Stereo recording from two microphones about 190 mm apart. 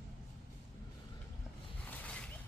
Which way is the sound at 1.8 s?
10° left (ahead or behind).